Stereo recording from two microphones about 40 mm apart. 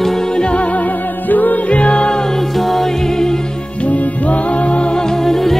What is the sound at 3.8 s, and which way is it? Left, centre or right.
Music, left.